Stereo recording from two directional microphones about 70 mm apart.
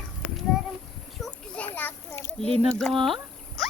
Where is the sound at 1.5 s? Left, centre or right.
Left.